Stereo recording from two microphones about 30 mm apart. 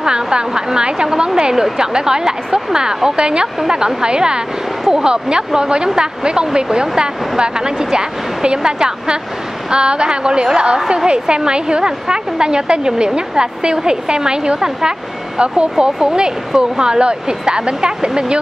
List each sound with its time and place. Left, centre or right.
0.0 s a sound: right
0.7 s a woman's voice: right
15.3 s a woman's voice: right